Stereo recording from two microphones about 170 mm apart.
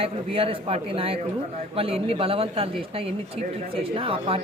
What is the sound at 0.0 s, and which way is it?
Speech, 35° right (ahead or behind).